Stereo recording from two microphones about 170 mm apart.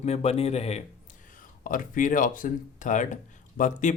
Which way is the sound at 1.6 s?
50° left (ahead or behind).